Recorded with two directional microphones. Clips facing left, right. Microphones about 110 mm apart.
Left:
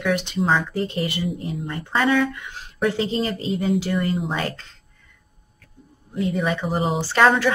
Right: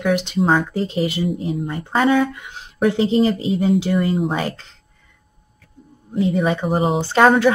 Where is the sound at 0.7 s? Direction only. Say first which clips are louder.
Right 4 dB; 20° right (ahead or behind).